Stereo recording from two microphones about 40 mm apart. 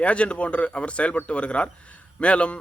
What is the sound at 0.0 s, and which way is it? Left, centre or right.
A man's voice, left.